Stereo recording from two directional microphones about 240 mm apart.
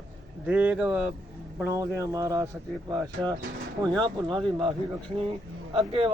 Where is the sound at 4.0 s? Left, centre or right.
Centre.